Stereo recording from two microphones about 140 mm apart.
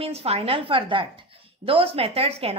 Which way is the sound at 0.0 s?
45° right (ahead or behind).